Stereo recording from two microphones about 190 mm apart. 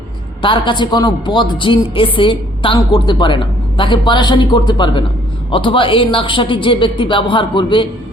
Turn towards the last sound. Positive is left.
turn(degrees=25)  # may be behind; listen again after turning